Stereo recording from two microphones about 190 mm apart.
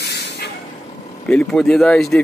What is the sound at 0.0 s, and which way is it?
Vehicle, 60° left (ahead or behind).